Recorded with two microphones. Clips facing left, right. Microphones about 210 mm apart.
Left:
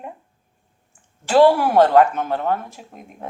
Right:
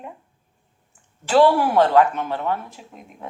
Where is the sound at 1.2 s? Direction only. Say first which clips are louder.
Left 2 dB; 45° left (ahead or behind).